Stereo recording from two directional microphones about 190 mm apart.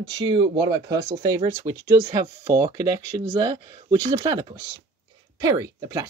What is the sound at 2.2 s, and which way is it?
Speech, 30° right (ahead or behind).